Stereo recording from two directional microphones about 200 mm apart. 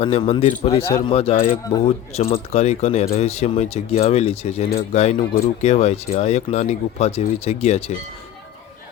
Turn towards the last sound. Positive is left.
turn(degrees=30)  # may be behind; listen again after turning